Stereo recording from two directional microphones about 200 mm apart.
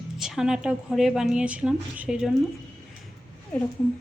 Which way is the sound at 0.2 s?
5° right (ahead or behind).